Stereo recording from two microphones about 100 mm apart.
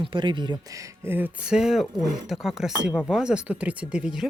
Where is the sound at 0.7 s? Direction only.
35° right (ahead or behind).